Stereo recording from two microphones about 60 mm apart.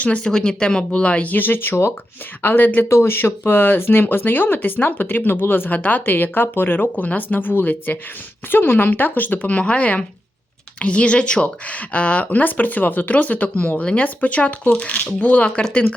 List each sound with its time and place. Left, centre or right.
0.0 s speech: left
2.9 s speech: left